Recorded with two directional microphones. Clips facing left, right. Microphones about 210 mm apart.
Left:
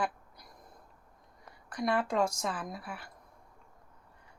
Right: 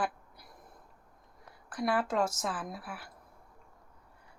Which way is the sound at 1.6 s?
5° right (ahead or behind).